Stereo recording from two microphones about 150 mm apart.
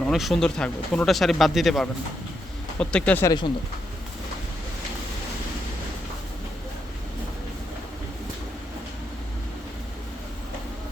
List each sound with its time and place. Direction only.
0.0 s speech: centre (ahead or behind)
3.2 s speech: 30° left (ahead or behind)